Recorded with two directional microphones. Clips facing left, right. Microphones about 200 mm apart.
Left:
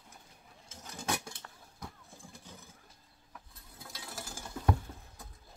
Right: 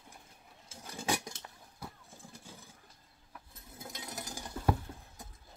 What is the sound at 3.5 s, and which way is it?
Mechanisms, 20° right (ahead or behind).